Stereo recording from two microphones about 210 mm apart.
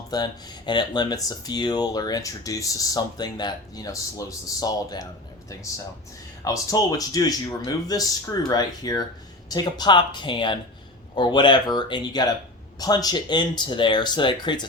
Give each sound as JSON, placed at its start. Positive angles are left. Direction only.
{"t": 0.1, "sound": "speech", "side_deg": 20}